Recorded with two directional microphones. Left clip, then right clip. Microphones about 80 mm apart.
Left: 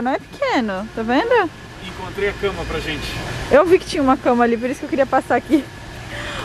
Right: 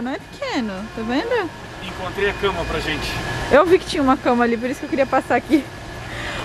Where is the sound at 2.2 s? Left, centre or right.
Right.